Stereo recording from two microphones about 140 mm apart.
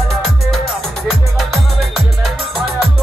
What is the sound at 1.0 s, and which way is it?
Music, centre (ahead or behind).